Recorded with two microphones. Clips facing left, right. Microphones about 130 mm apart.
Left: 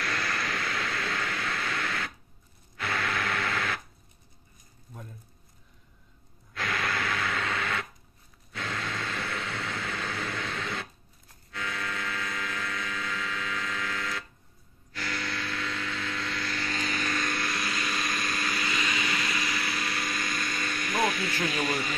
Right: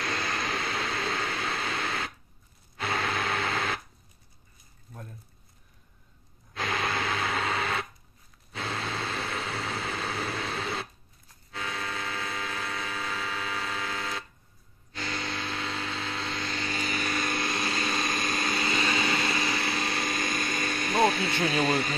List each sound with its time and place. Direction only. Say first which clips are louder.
0.0 s a sound: right 1 dB; 25° right (ahead or behind)
2.8 s radio: right 1 dB; 25° right (ahead or behind)
6.5 s a sound: right 1 dB; 25° right (ahead or behind)
11.5 s vehicle: even; 25° right (ahead or behind)
16.8 s vehicle: right 1 dB; 5° right (ahead or behind)
17.2 s vehicle: right 2 dB; 25° right (ahead or behind)